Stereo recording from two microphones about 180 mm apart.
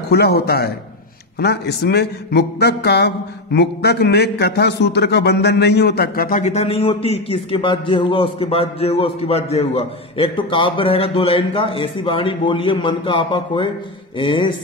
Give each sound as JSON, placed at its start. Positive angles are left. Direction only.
{"t": 0.1, "sound": "a man's voice", "side_deg": 60}